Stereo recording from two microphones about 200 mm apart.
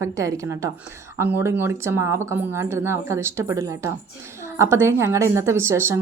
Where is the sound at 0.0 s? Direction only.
15° right (ahead or behind).